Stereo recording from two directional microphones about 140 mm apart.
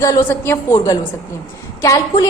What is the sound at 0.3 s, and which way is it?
A woman's voice, 15° left (ahead or behind).